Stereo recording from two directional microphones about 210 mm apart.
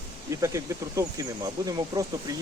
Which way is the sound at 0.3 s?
15° right (ahead or behind).